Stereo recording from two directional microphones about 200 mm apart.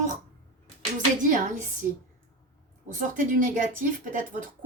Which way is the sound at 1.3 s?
40° right (ahead or behind).